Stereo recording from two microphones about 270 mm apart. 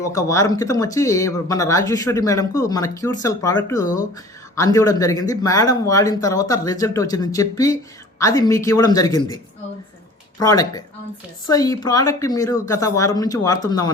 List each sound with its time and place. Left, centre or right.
0.1 s speech: centre
10.4 s speech: centre